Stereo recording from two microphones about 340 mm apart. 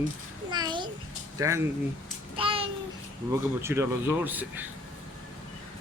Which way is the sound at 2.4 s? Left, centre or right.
Centre.